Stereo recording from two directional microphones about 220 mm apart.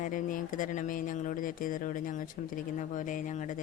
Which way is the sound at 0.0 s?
40° left (ahead or behind).